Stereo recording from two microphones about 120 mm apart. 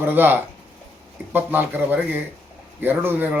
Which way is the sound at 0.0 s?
15° right (ahead or behind).